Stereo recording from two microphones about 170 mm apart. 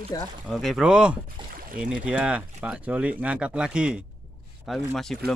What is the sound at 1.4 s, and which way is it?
Rowboat, 30° right (ahead or behind).